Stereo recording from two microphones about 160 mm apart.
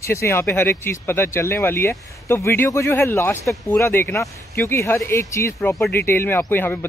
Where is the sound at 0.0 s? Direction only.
15° left (ahead or behind).